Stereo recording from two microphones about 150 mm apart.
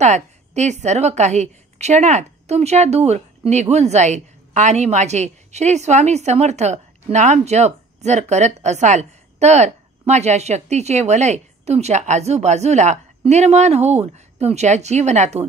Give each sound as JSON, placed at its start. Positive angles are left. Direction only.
{"t": 0.0, "sound": "a woman's voice", "side_deg": -50}